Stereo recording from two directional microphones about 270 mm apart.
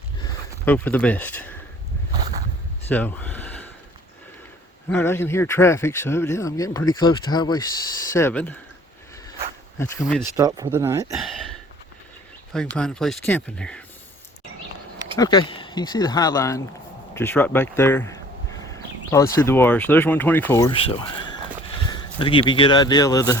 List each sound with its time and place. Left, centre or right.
0.6 s speech: centre
2.9 s a sound: centre
4.9 s speech: centre
10.0 s speech: centre
10.3 s speech: centre
11.1 s speech: centre
12.5 s speech: centre
15.2 s speech: centre